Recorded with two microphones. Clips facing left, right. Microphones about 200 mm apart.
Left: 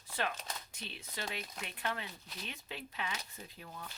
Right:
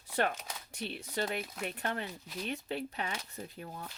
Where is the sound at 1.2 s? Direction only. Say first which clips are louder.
Right 8 dB; 50° right (ahead or behind).